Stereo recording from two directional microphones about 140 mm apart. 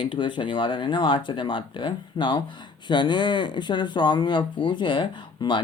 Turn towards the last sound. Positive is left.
turn(degrees=35)  # may be behind; listen again after turning